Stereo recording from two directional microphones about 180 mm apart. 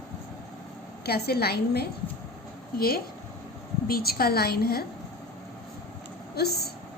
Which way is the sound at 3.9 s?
55° left (ahead or behind).